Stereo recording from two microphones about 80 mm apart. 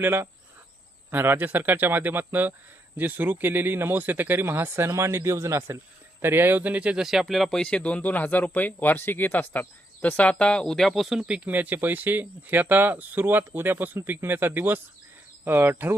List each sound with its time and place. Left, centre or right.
0.0 s a man's voice: right